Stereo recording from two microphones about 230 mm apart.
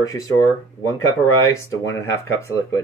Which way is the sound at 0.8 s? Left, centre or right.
Left.